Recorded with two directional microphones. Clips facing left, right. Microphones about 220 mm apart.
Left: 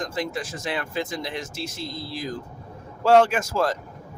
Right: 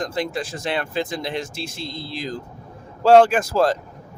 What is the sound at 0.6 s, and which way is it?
Speech, 30° right (ahead or behind).